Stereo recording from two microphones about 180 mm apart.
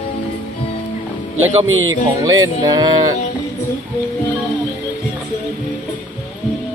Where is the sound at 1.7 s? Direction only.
90° right.